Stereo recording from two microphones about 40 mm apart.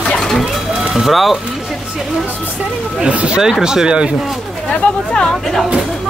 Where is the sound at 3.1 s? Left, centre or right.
Right.